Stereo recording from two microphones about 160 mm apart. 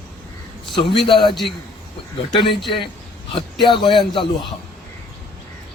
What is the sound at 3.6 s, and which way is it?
Speech, 30° left (ahead or behind).